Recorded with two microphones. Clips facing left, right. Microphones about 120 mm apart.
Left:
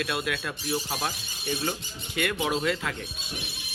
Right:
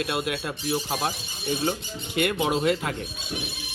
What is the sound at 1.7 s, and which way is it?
Speech, 35° right (ahead or behind).